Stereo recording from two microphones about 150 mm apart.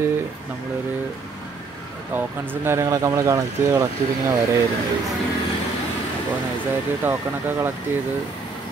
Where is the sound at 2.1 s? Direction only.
15° right (ahead or behind).